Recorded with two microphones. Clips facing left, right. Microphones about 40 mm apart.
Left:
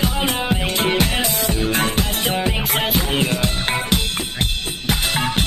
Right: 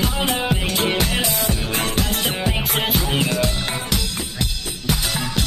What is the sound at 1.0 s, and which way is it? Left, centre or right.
Music, left.